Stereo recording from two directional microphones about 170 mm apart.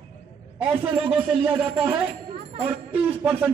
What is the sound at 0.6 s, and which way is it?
A man's voice, 10° right (ahead or behind).